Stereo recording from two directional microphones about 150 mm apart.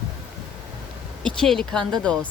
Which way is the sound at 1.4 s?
5° left (ahead or behind).